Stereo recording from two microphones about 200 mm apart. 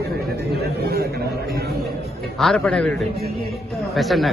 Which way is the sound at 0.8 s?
50° right (ahead or behind).